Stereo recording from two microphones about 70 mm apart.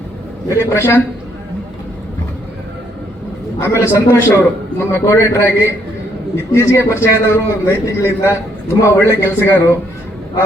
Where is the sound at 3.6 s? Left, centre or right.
Left.